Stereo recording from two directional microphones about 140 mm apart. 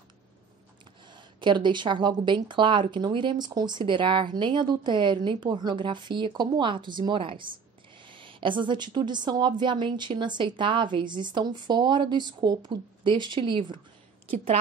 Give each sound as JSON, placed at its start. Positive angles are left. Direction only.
{"t": 1.4, "sound": "speech", "side_deg": -35}